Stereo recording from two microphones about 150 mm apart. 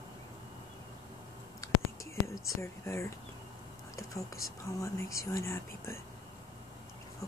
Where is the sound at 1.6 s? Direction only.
20° left (ahead or behind).